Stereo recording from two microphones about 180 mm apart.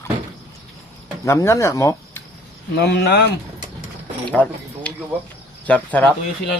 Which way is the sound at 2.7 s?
65° left (ahead or behind).